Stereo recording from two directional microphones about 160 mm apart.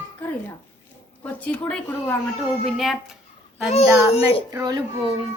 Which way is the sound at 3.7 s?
40° left (ahead or behind).